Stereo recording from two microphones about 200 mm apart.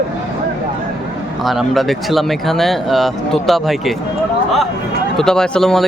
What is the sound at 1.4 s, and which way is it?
Speech, centre (ahead or behind).